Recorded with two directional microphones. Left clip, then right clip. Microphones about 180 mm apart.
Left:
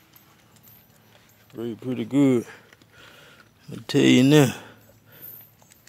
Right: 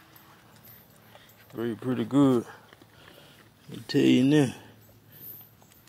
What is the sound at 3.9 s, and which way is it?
Speech, 35° left (ahead or behind).